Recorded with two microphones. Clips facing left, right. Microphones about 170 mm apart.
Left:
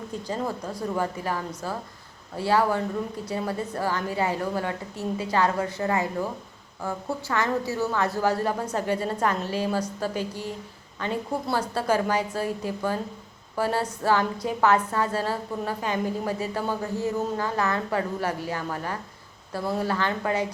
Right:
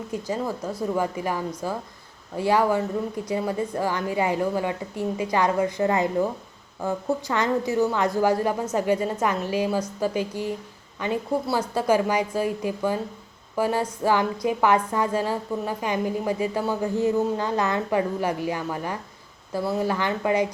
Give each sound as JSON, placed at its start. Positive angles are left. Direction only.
{"t": 0.1, "sound": "a woman's voice", "side_deg": -10}